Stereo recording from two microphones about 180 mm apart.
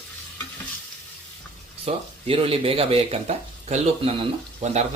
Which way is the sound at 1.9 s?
30° right (ahead or behind).